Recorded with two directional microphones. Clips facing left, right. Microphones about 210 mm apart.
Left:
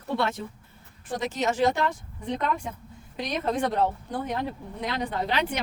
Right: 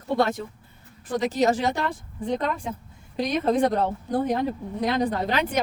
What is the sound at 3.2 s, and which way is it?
Speech, 35° right (ahead or behind).